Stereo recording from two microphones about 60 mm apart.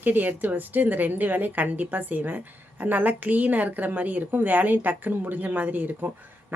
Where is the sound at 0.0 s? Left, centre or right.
Right.